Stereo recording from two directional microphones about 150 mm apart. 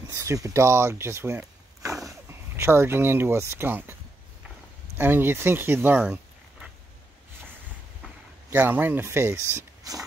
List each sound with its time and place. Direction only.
0.1 s speech: 20° right (ahead or behind)
4.9 s speech: 15° right (ahead or behind)
8.5 s speech: 10° right (ahead or behind)